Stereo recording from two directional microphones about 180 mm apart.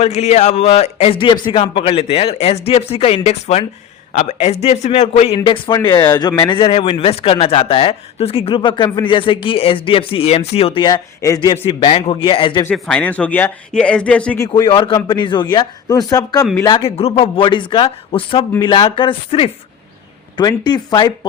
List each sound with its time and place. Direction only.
0.0 s a man's voice: 35° left (ahead or behind); by 11.5 s 20° left (ahead or behind)
11.5 s a man's voice: 30° left (ahead or behind)
12.6 s speech: 5° left (ahead or behind)
14.4 s a man's voice: 25° left (ahead or behind)